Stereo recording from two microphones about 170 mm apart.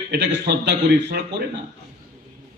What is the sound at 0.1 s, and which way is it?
A man's voice, 85° right.